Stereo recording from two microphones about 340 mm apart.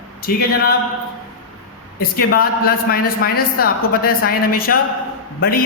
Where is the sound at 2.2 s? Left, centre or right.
Left.